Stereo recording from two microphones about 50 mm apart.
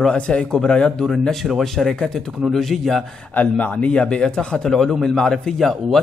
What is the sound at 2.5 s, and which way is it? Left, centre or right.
Speech, centre.